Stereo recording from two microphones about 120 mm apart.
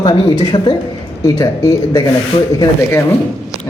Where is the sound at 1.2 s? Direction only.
30° left (ahead or behind).